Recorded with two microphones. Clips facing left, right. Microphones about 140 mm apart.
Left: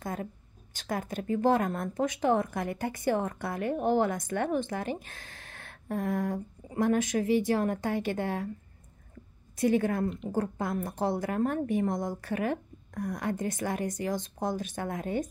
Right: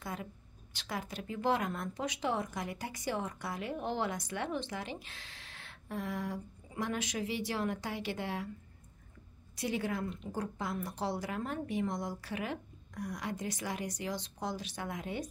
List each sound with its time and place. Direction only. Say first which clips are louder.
0.0 s a sound: left 6 dB; 45° left (ahead or behind)
0.7 s speech: left 7 dB; 50° left (ahead or behind)
9.6 s speech: left 9 dB; 50° left (ahead or behind)